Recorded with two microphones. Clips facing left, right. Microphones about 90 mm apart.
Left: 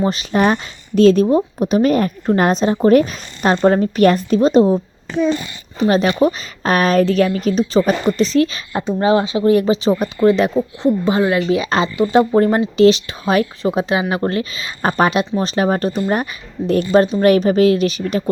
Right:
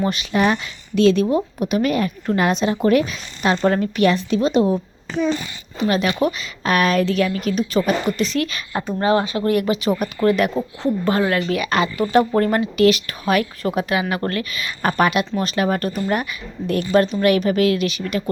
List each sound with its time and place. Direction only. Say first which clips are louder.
0.0 s speech: left 3 dB; 35° left (ahead or behind)
5.9 s speech: left 5 dB; 35° left (ahead or behind)
9.0 s speech: left 3 dB; 20° left (ahead or behind)